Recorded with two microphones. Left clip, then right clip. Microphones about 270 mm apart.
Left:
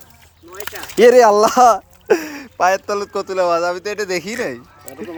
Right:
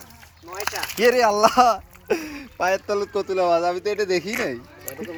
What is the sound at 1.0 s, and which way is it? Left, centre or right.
Speech, left.